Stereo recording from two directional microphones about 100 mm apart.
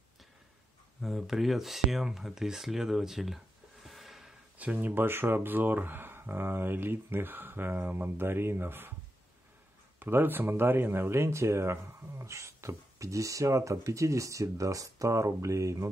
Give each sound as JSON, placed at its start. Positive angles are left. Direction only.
{"t": 1.0, "sound": "speech", "side_deg": 0}
{"t": 3.8, "sound": "a sound", "side_deg": 0}
{"t": 4.6, "sound": "speech", "side_deg": -15}
{"t": 9.9, "sound": "speech", "side_deg": -20}